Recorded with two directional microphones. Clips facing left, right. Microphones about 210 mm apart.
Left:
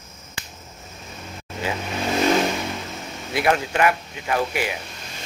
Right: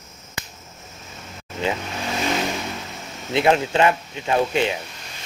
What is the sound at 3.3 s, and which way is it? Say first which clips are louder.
Speech: right 3 dB; 20° right (ahead or behind).